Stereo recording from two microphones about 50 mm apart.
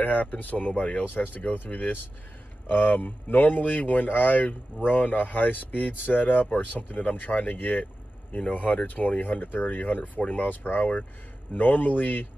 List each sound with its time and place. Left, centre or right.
0.0 s speech: left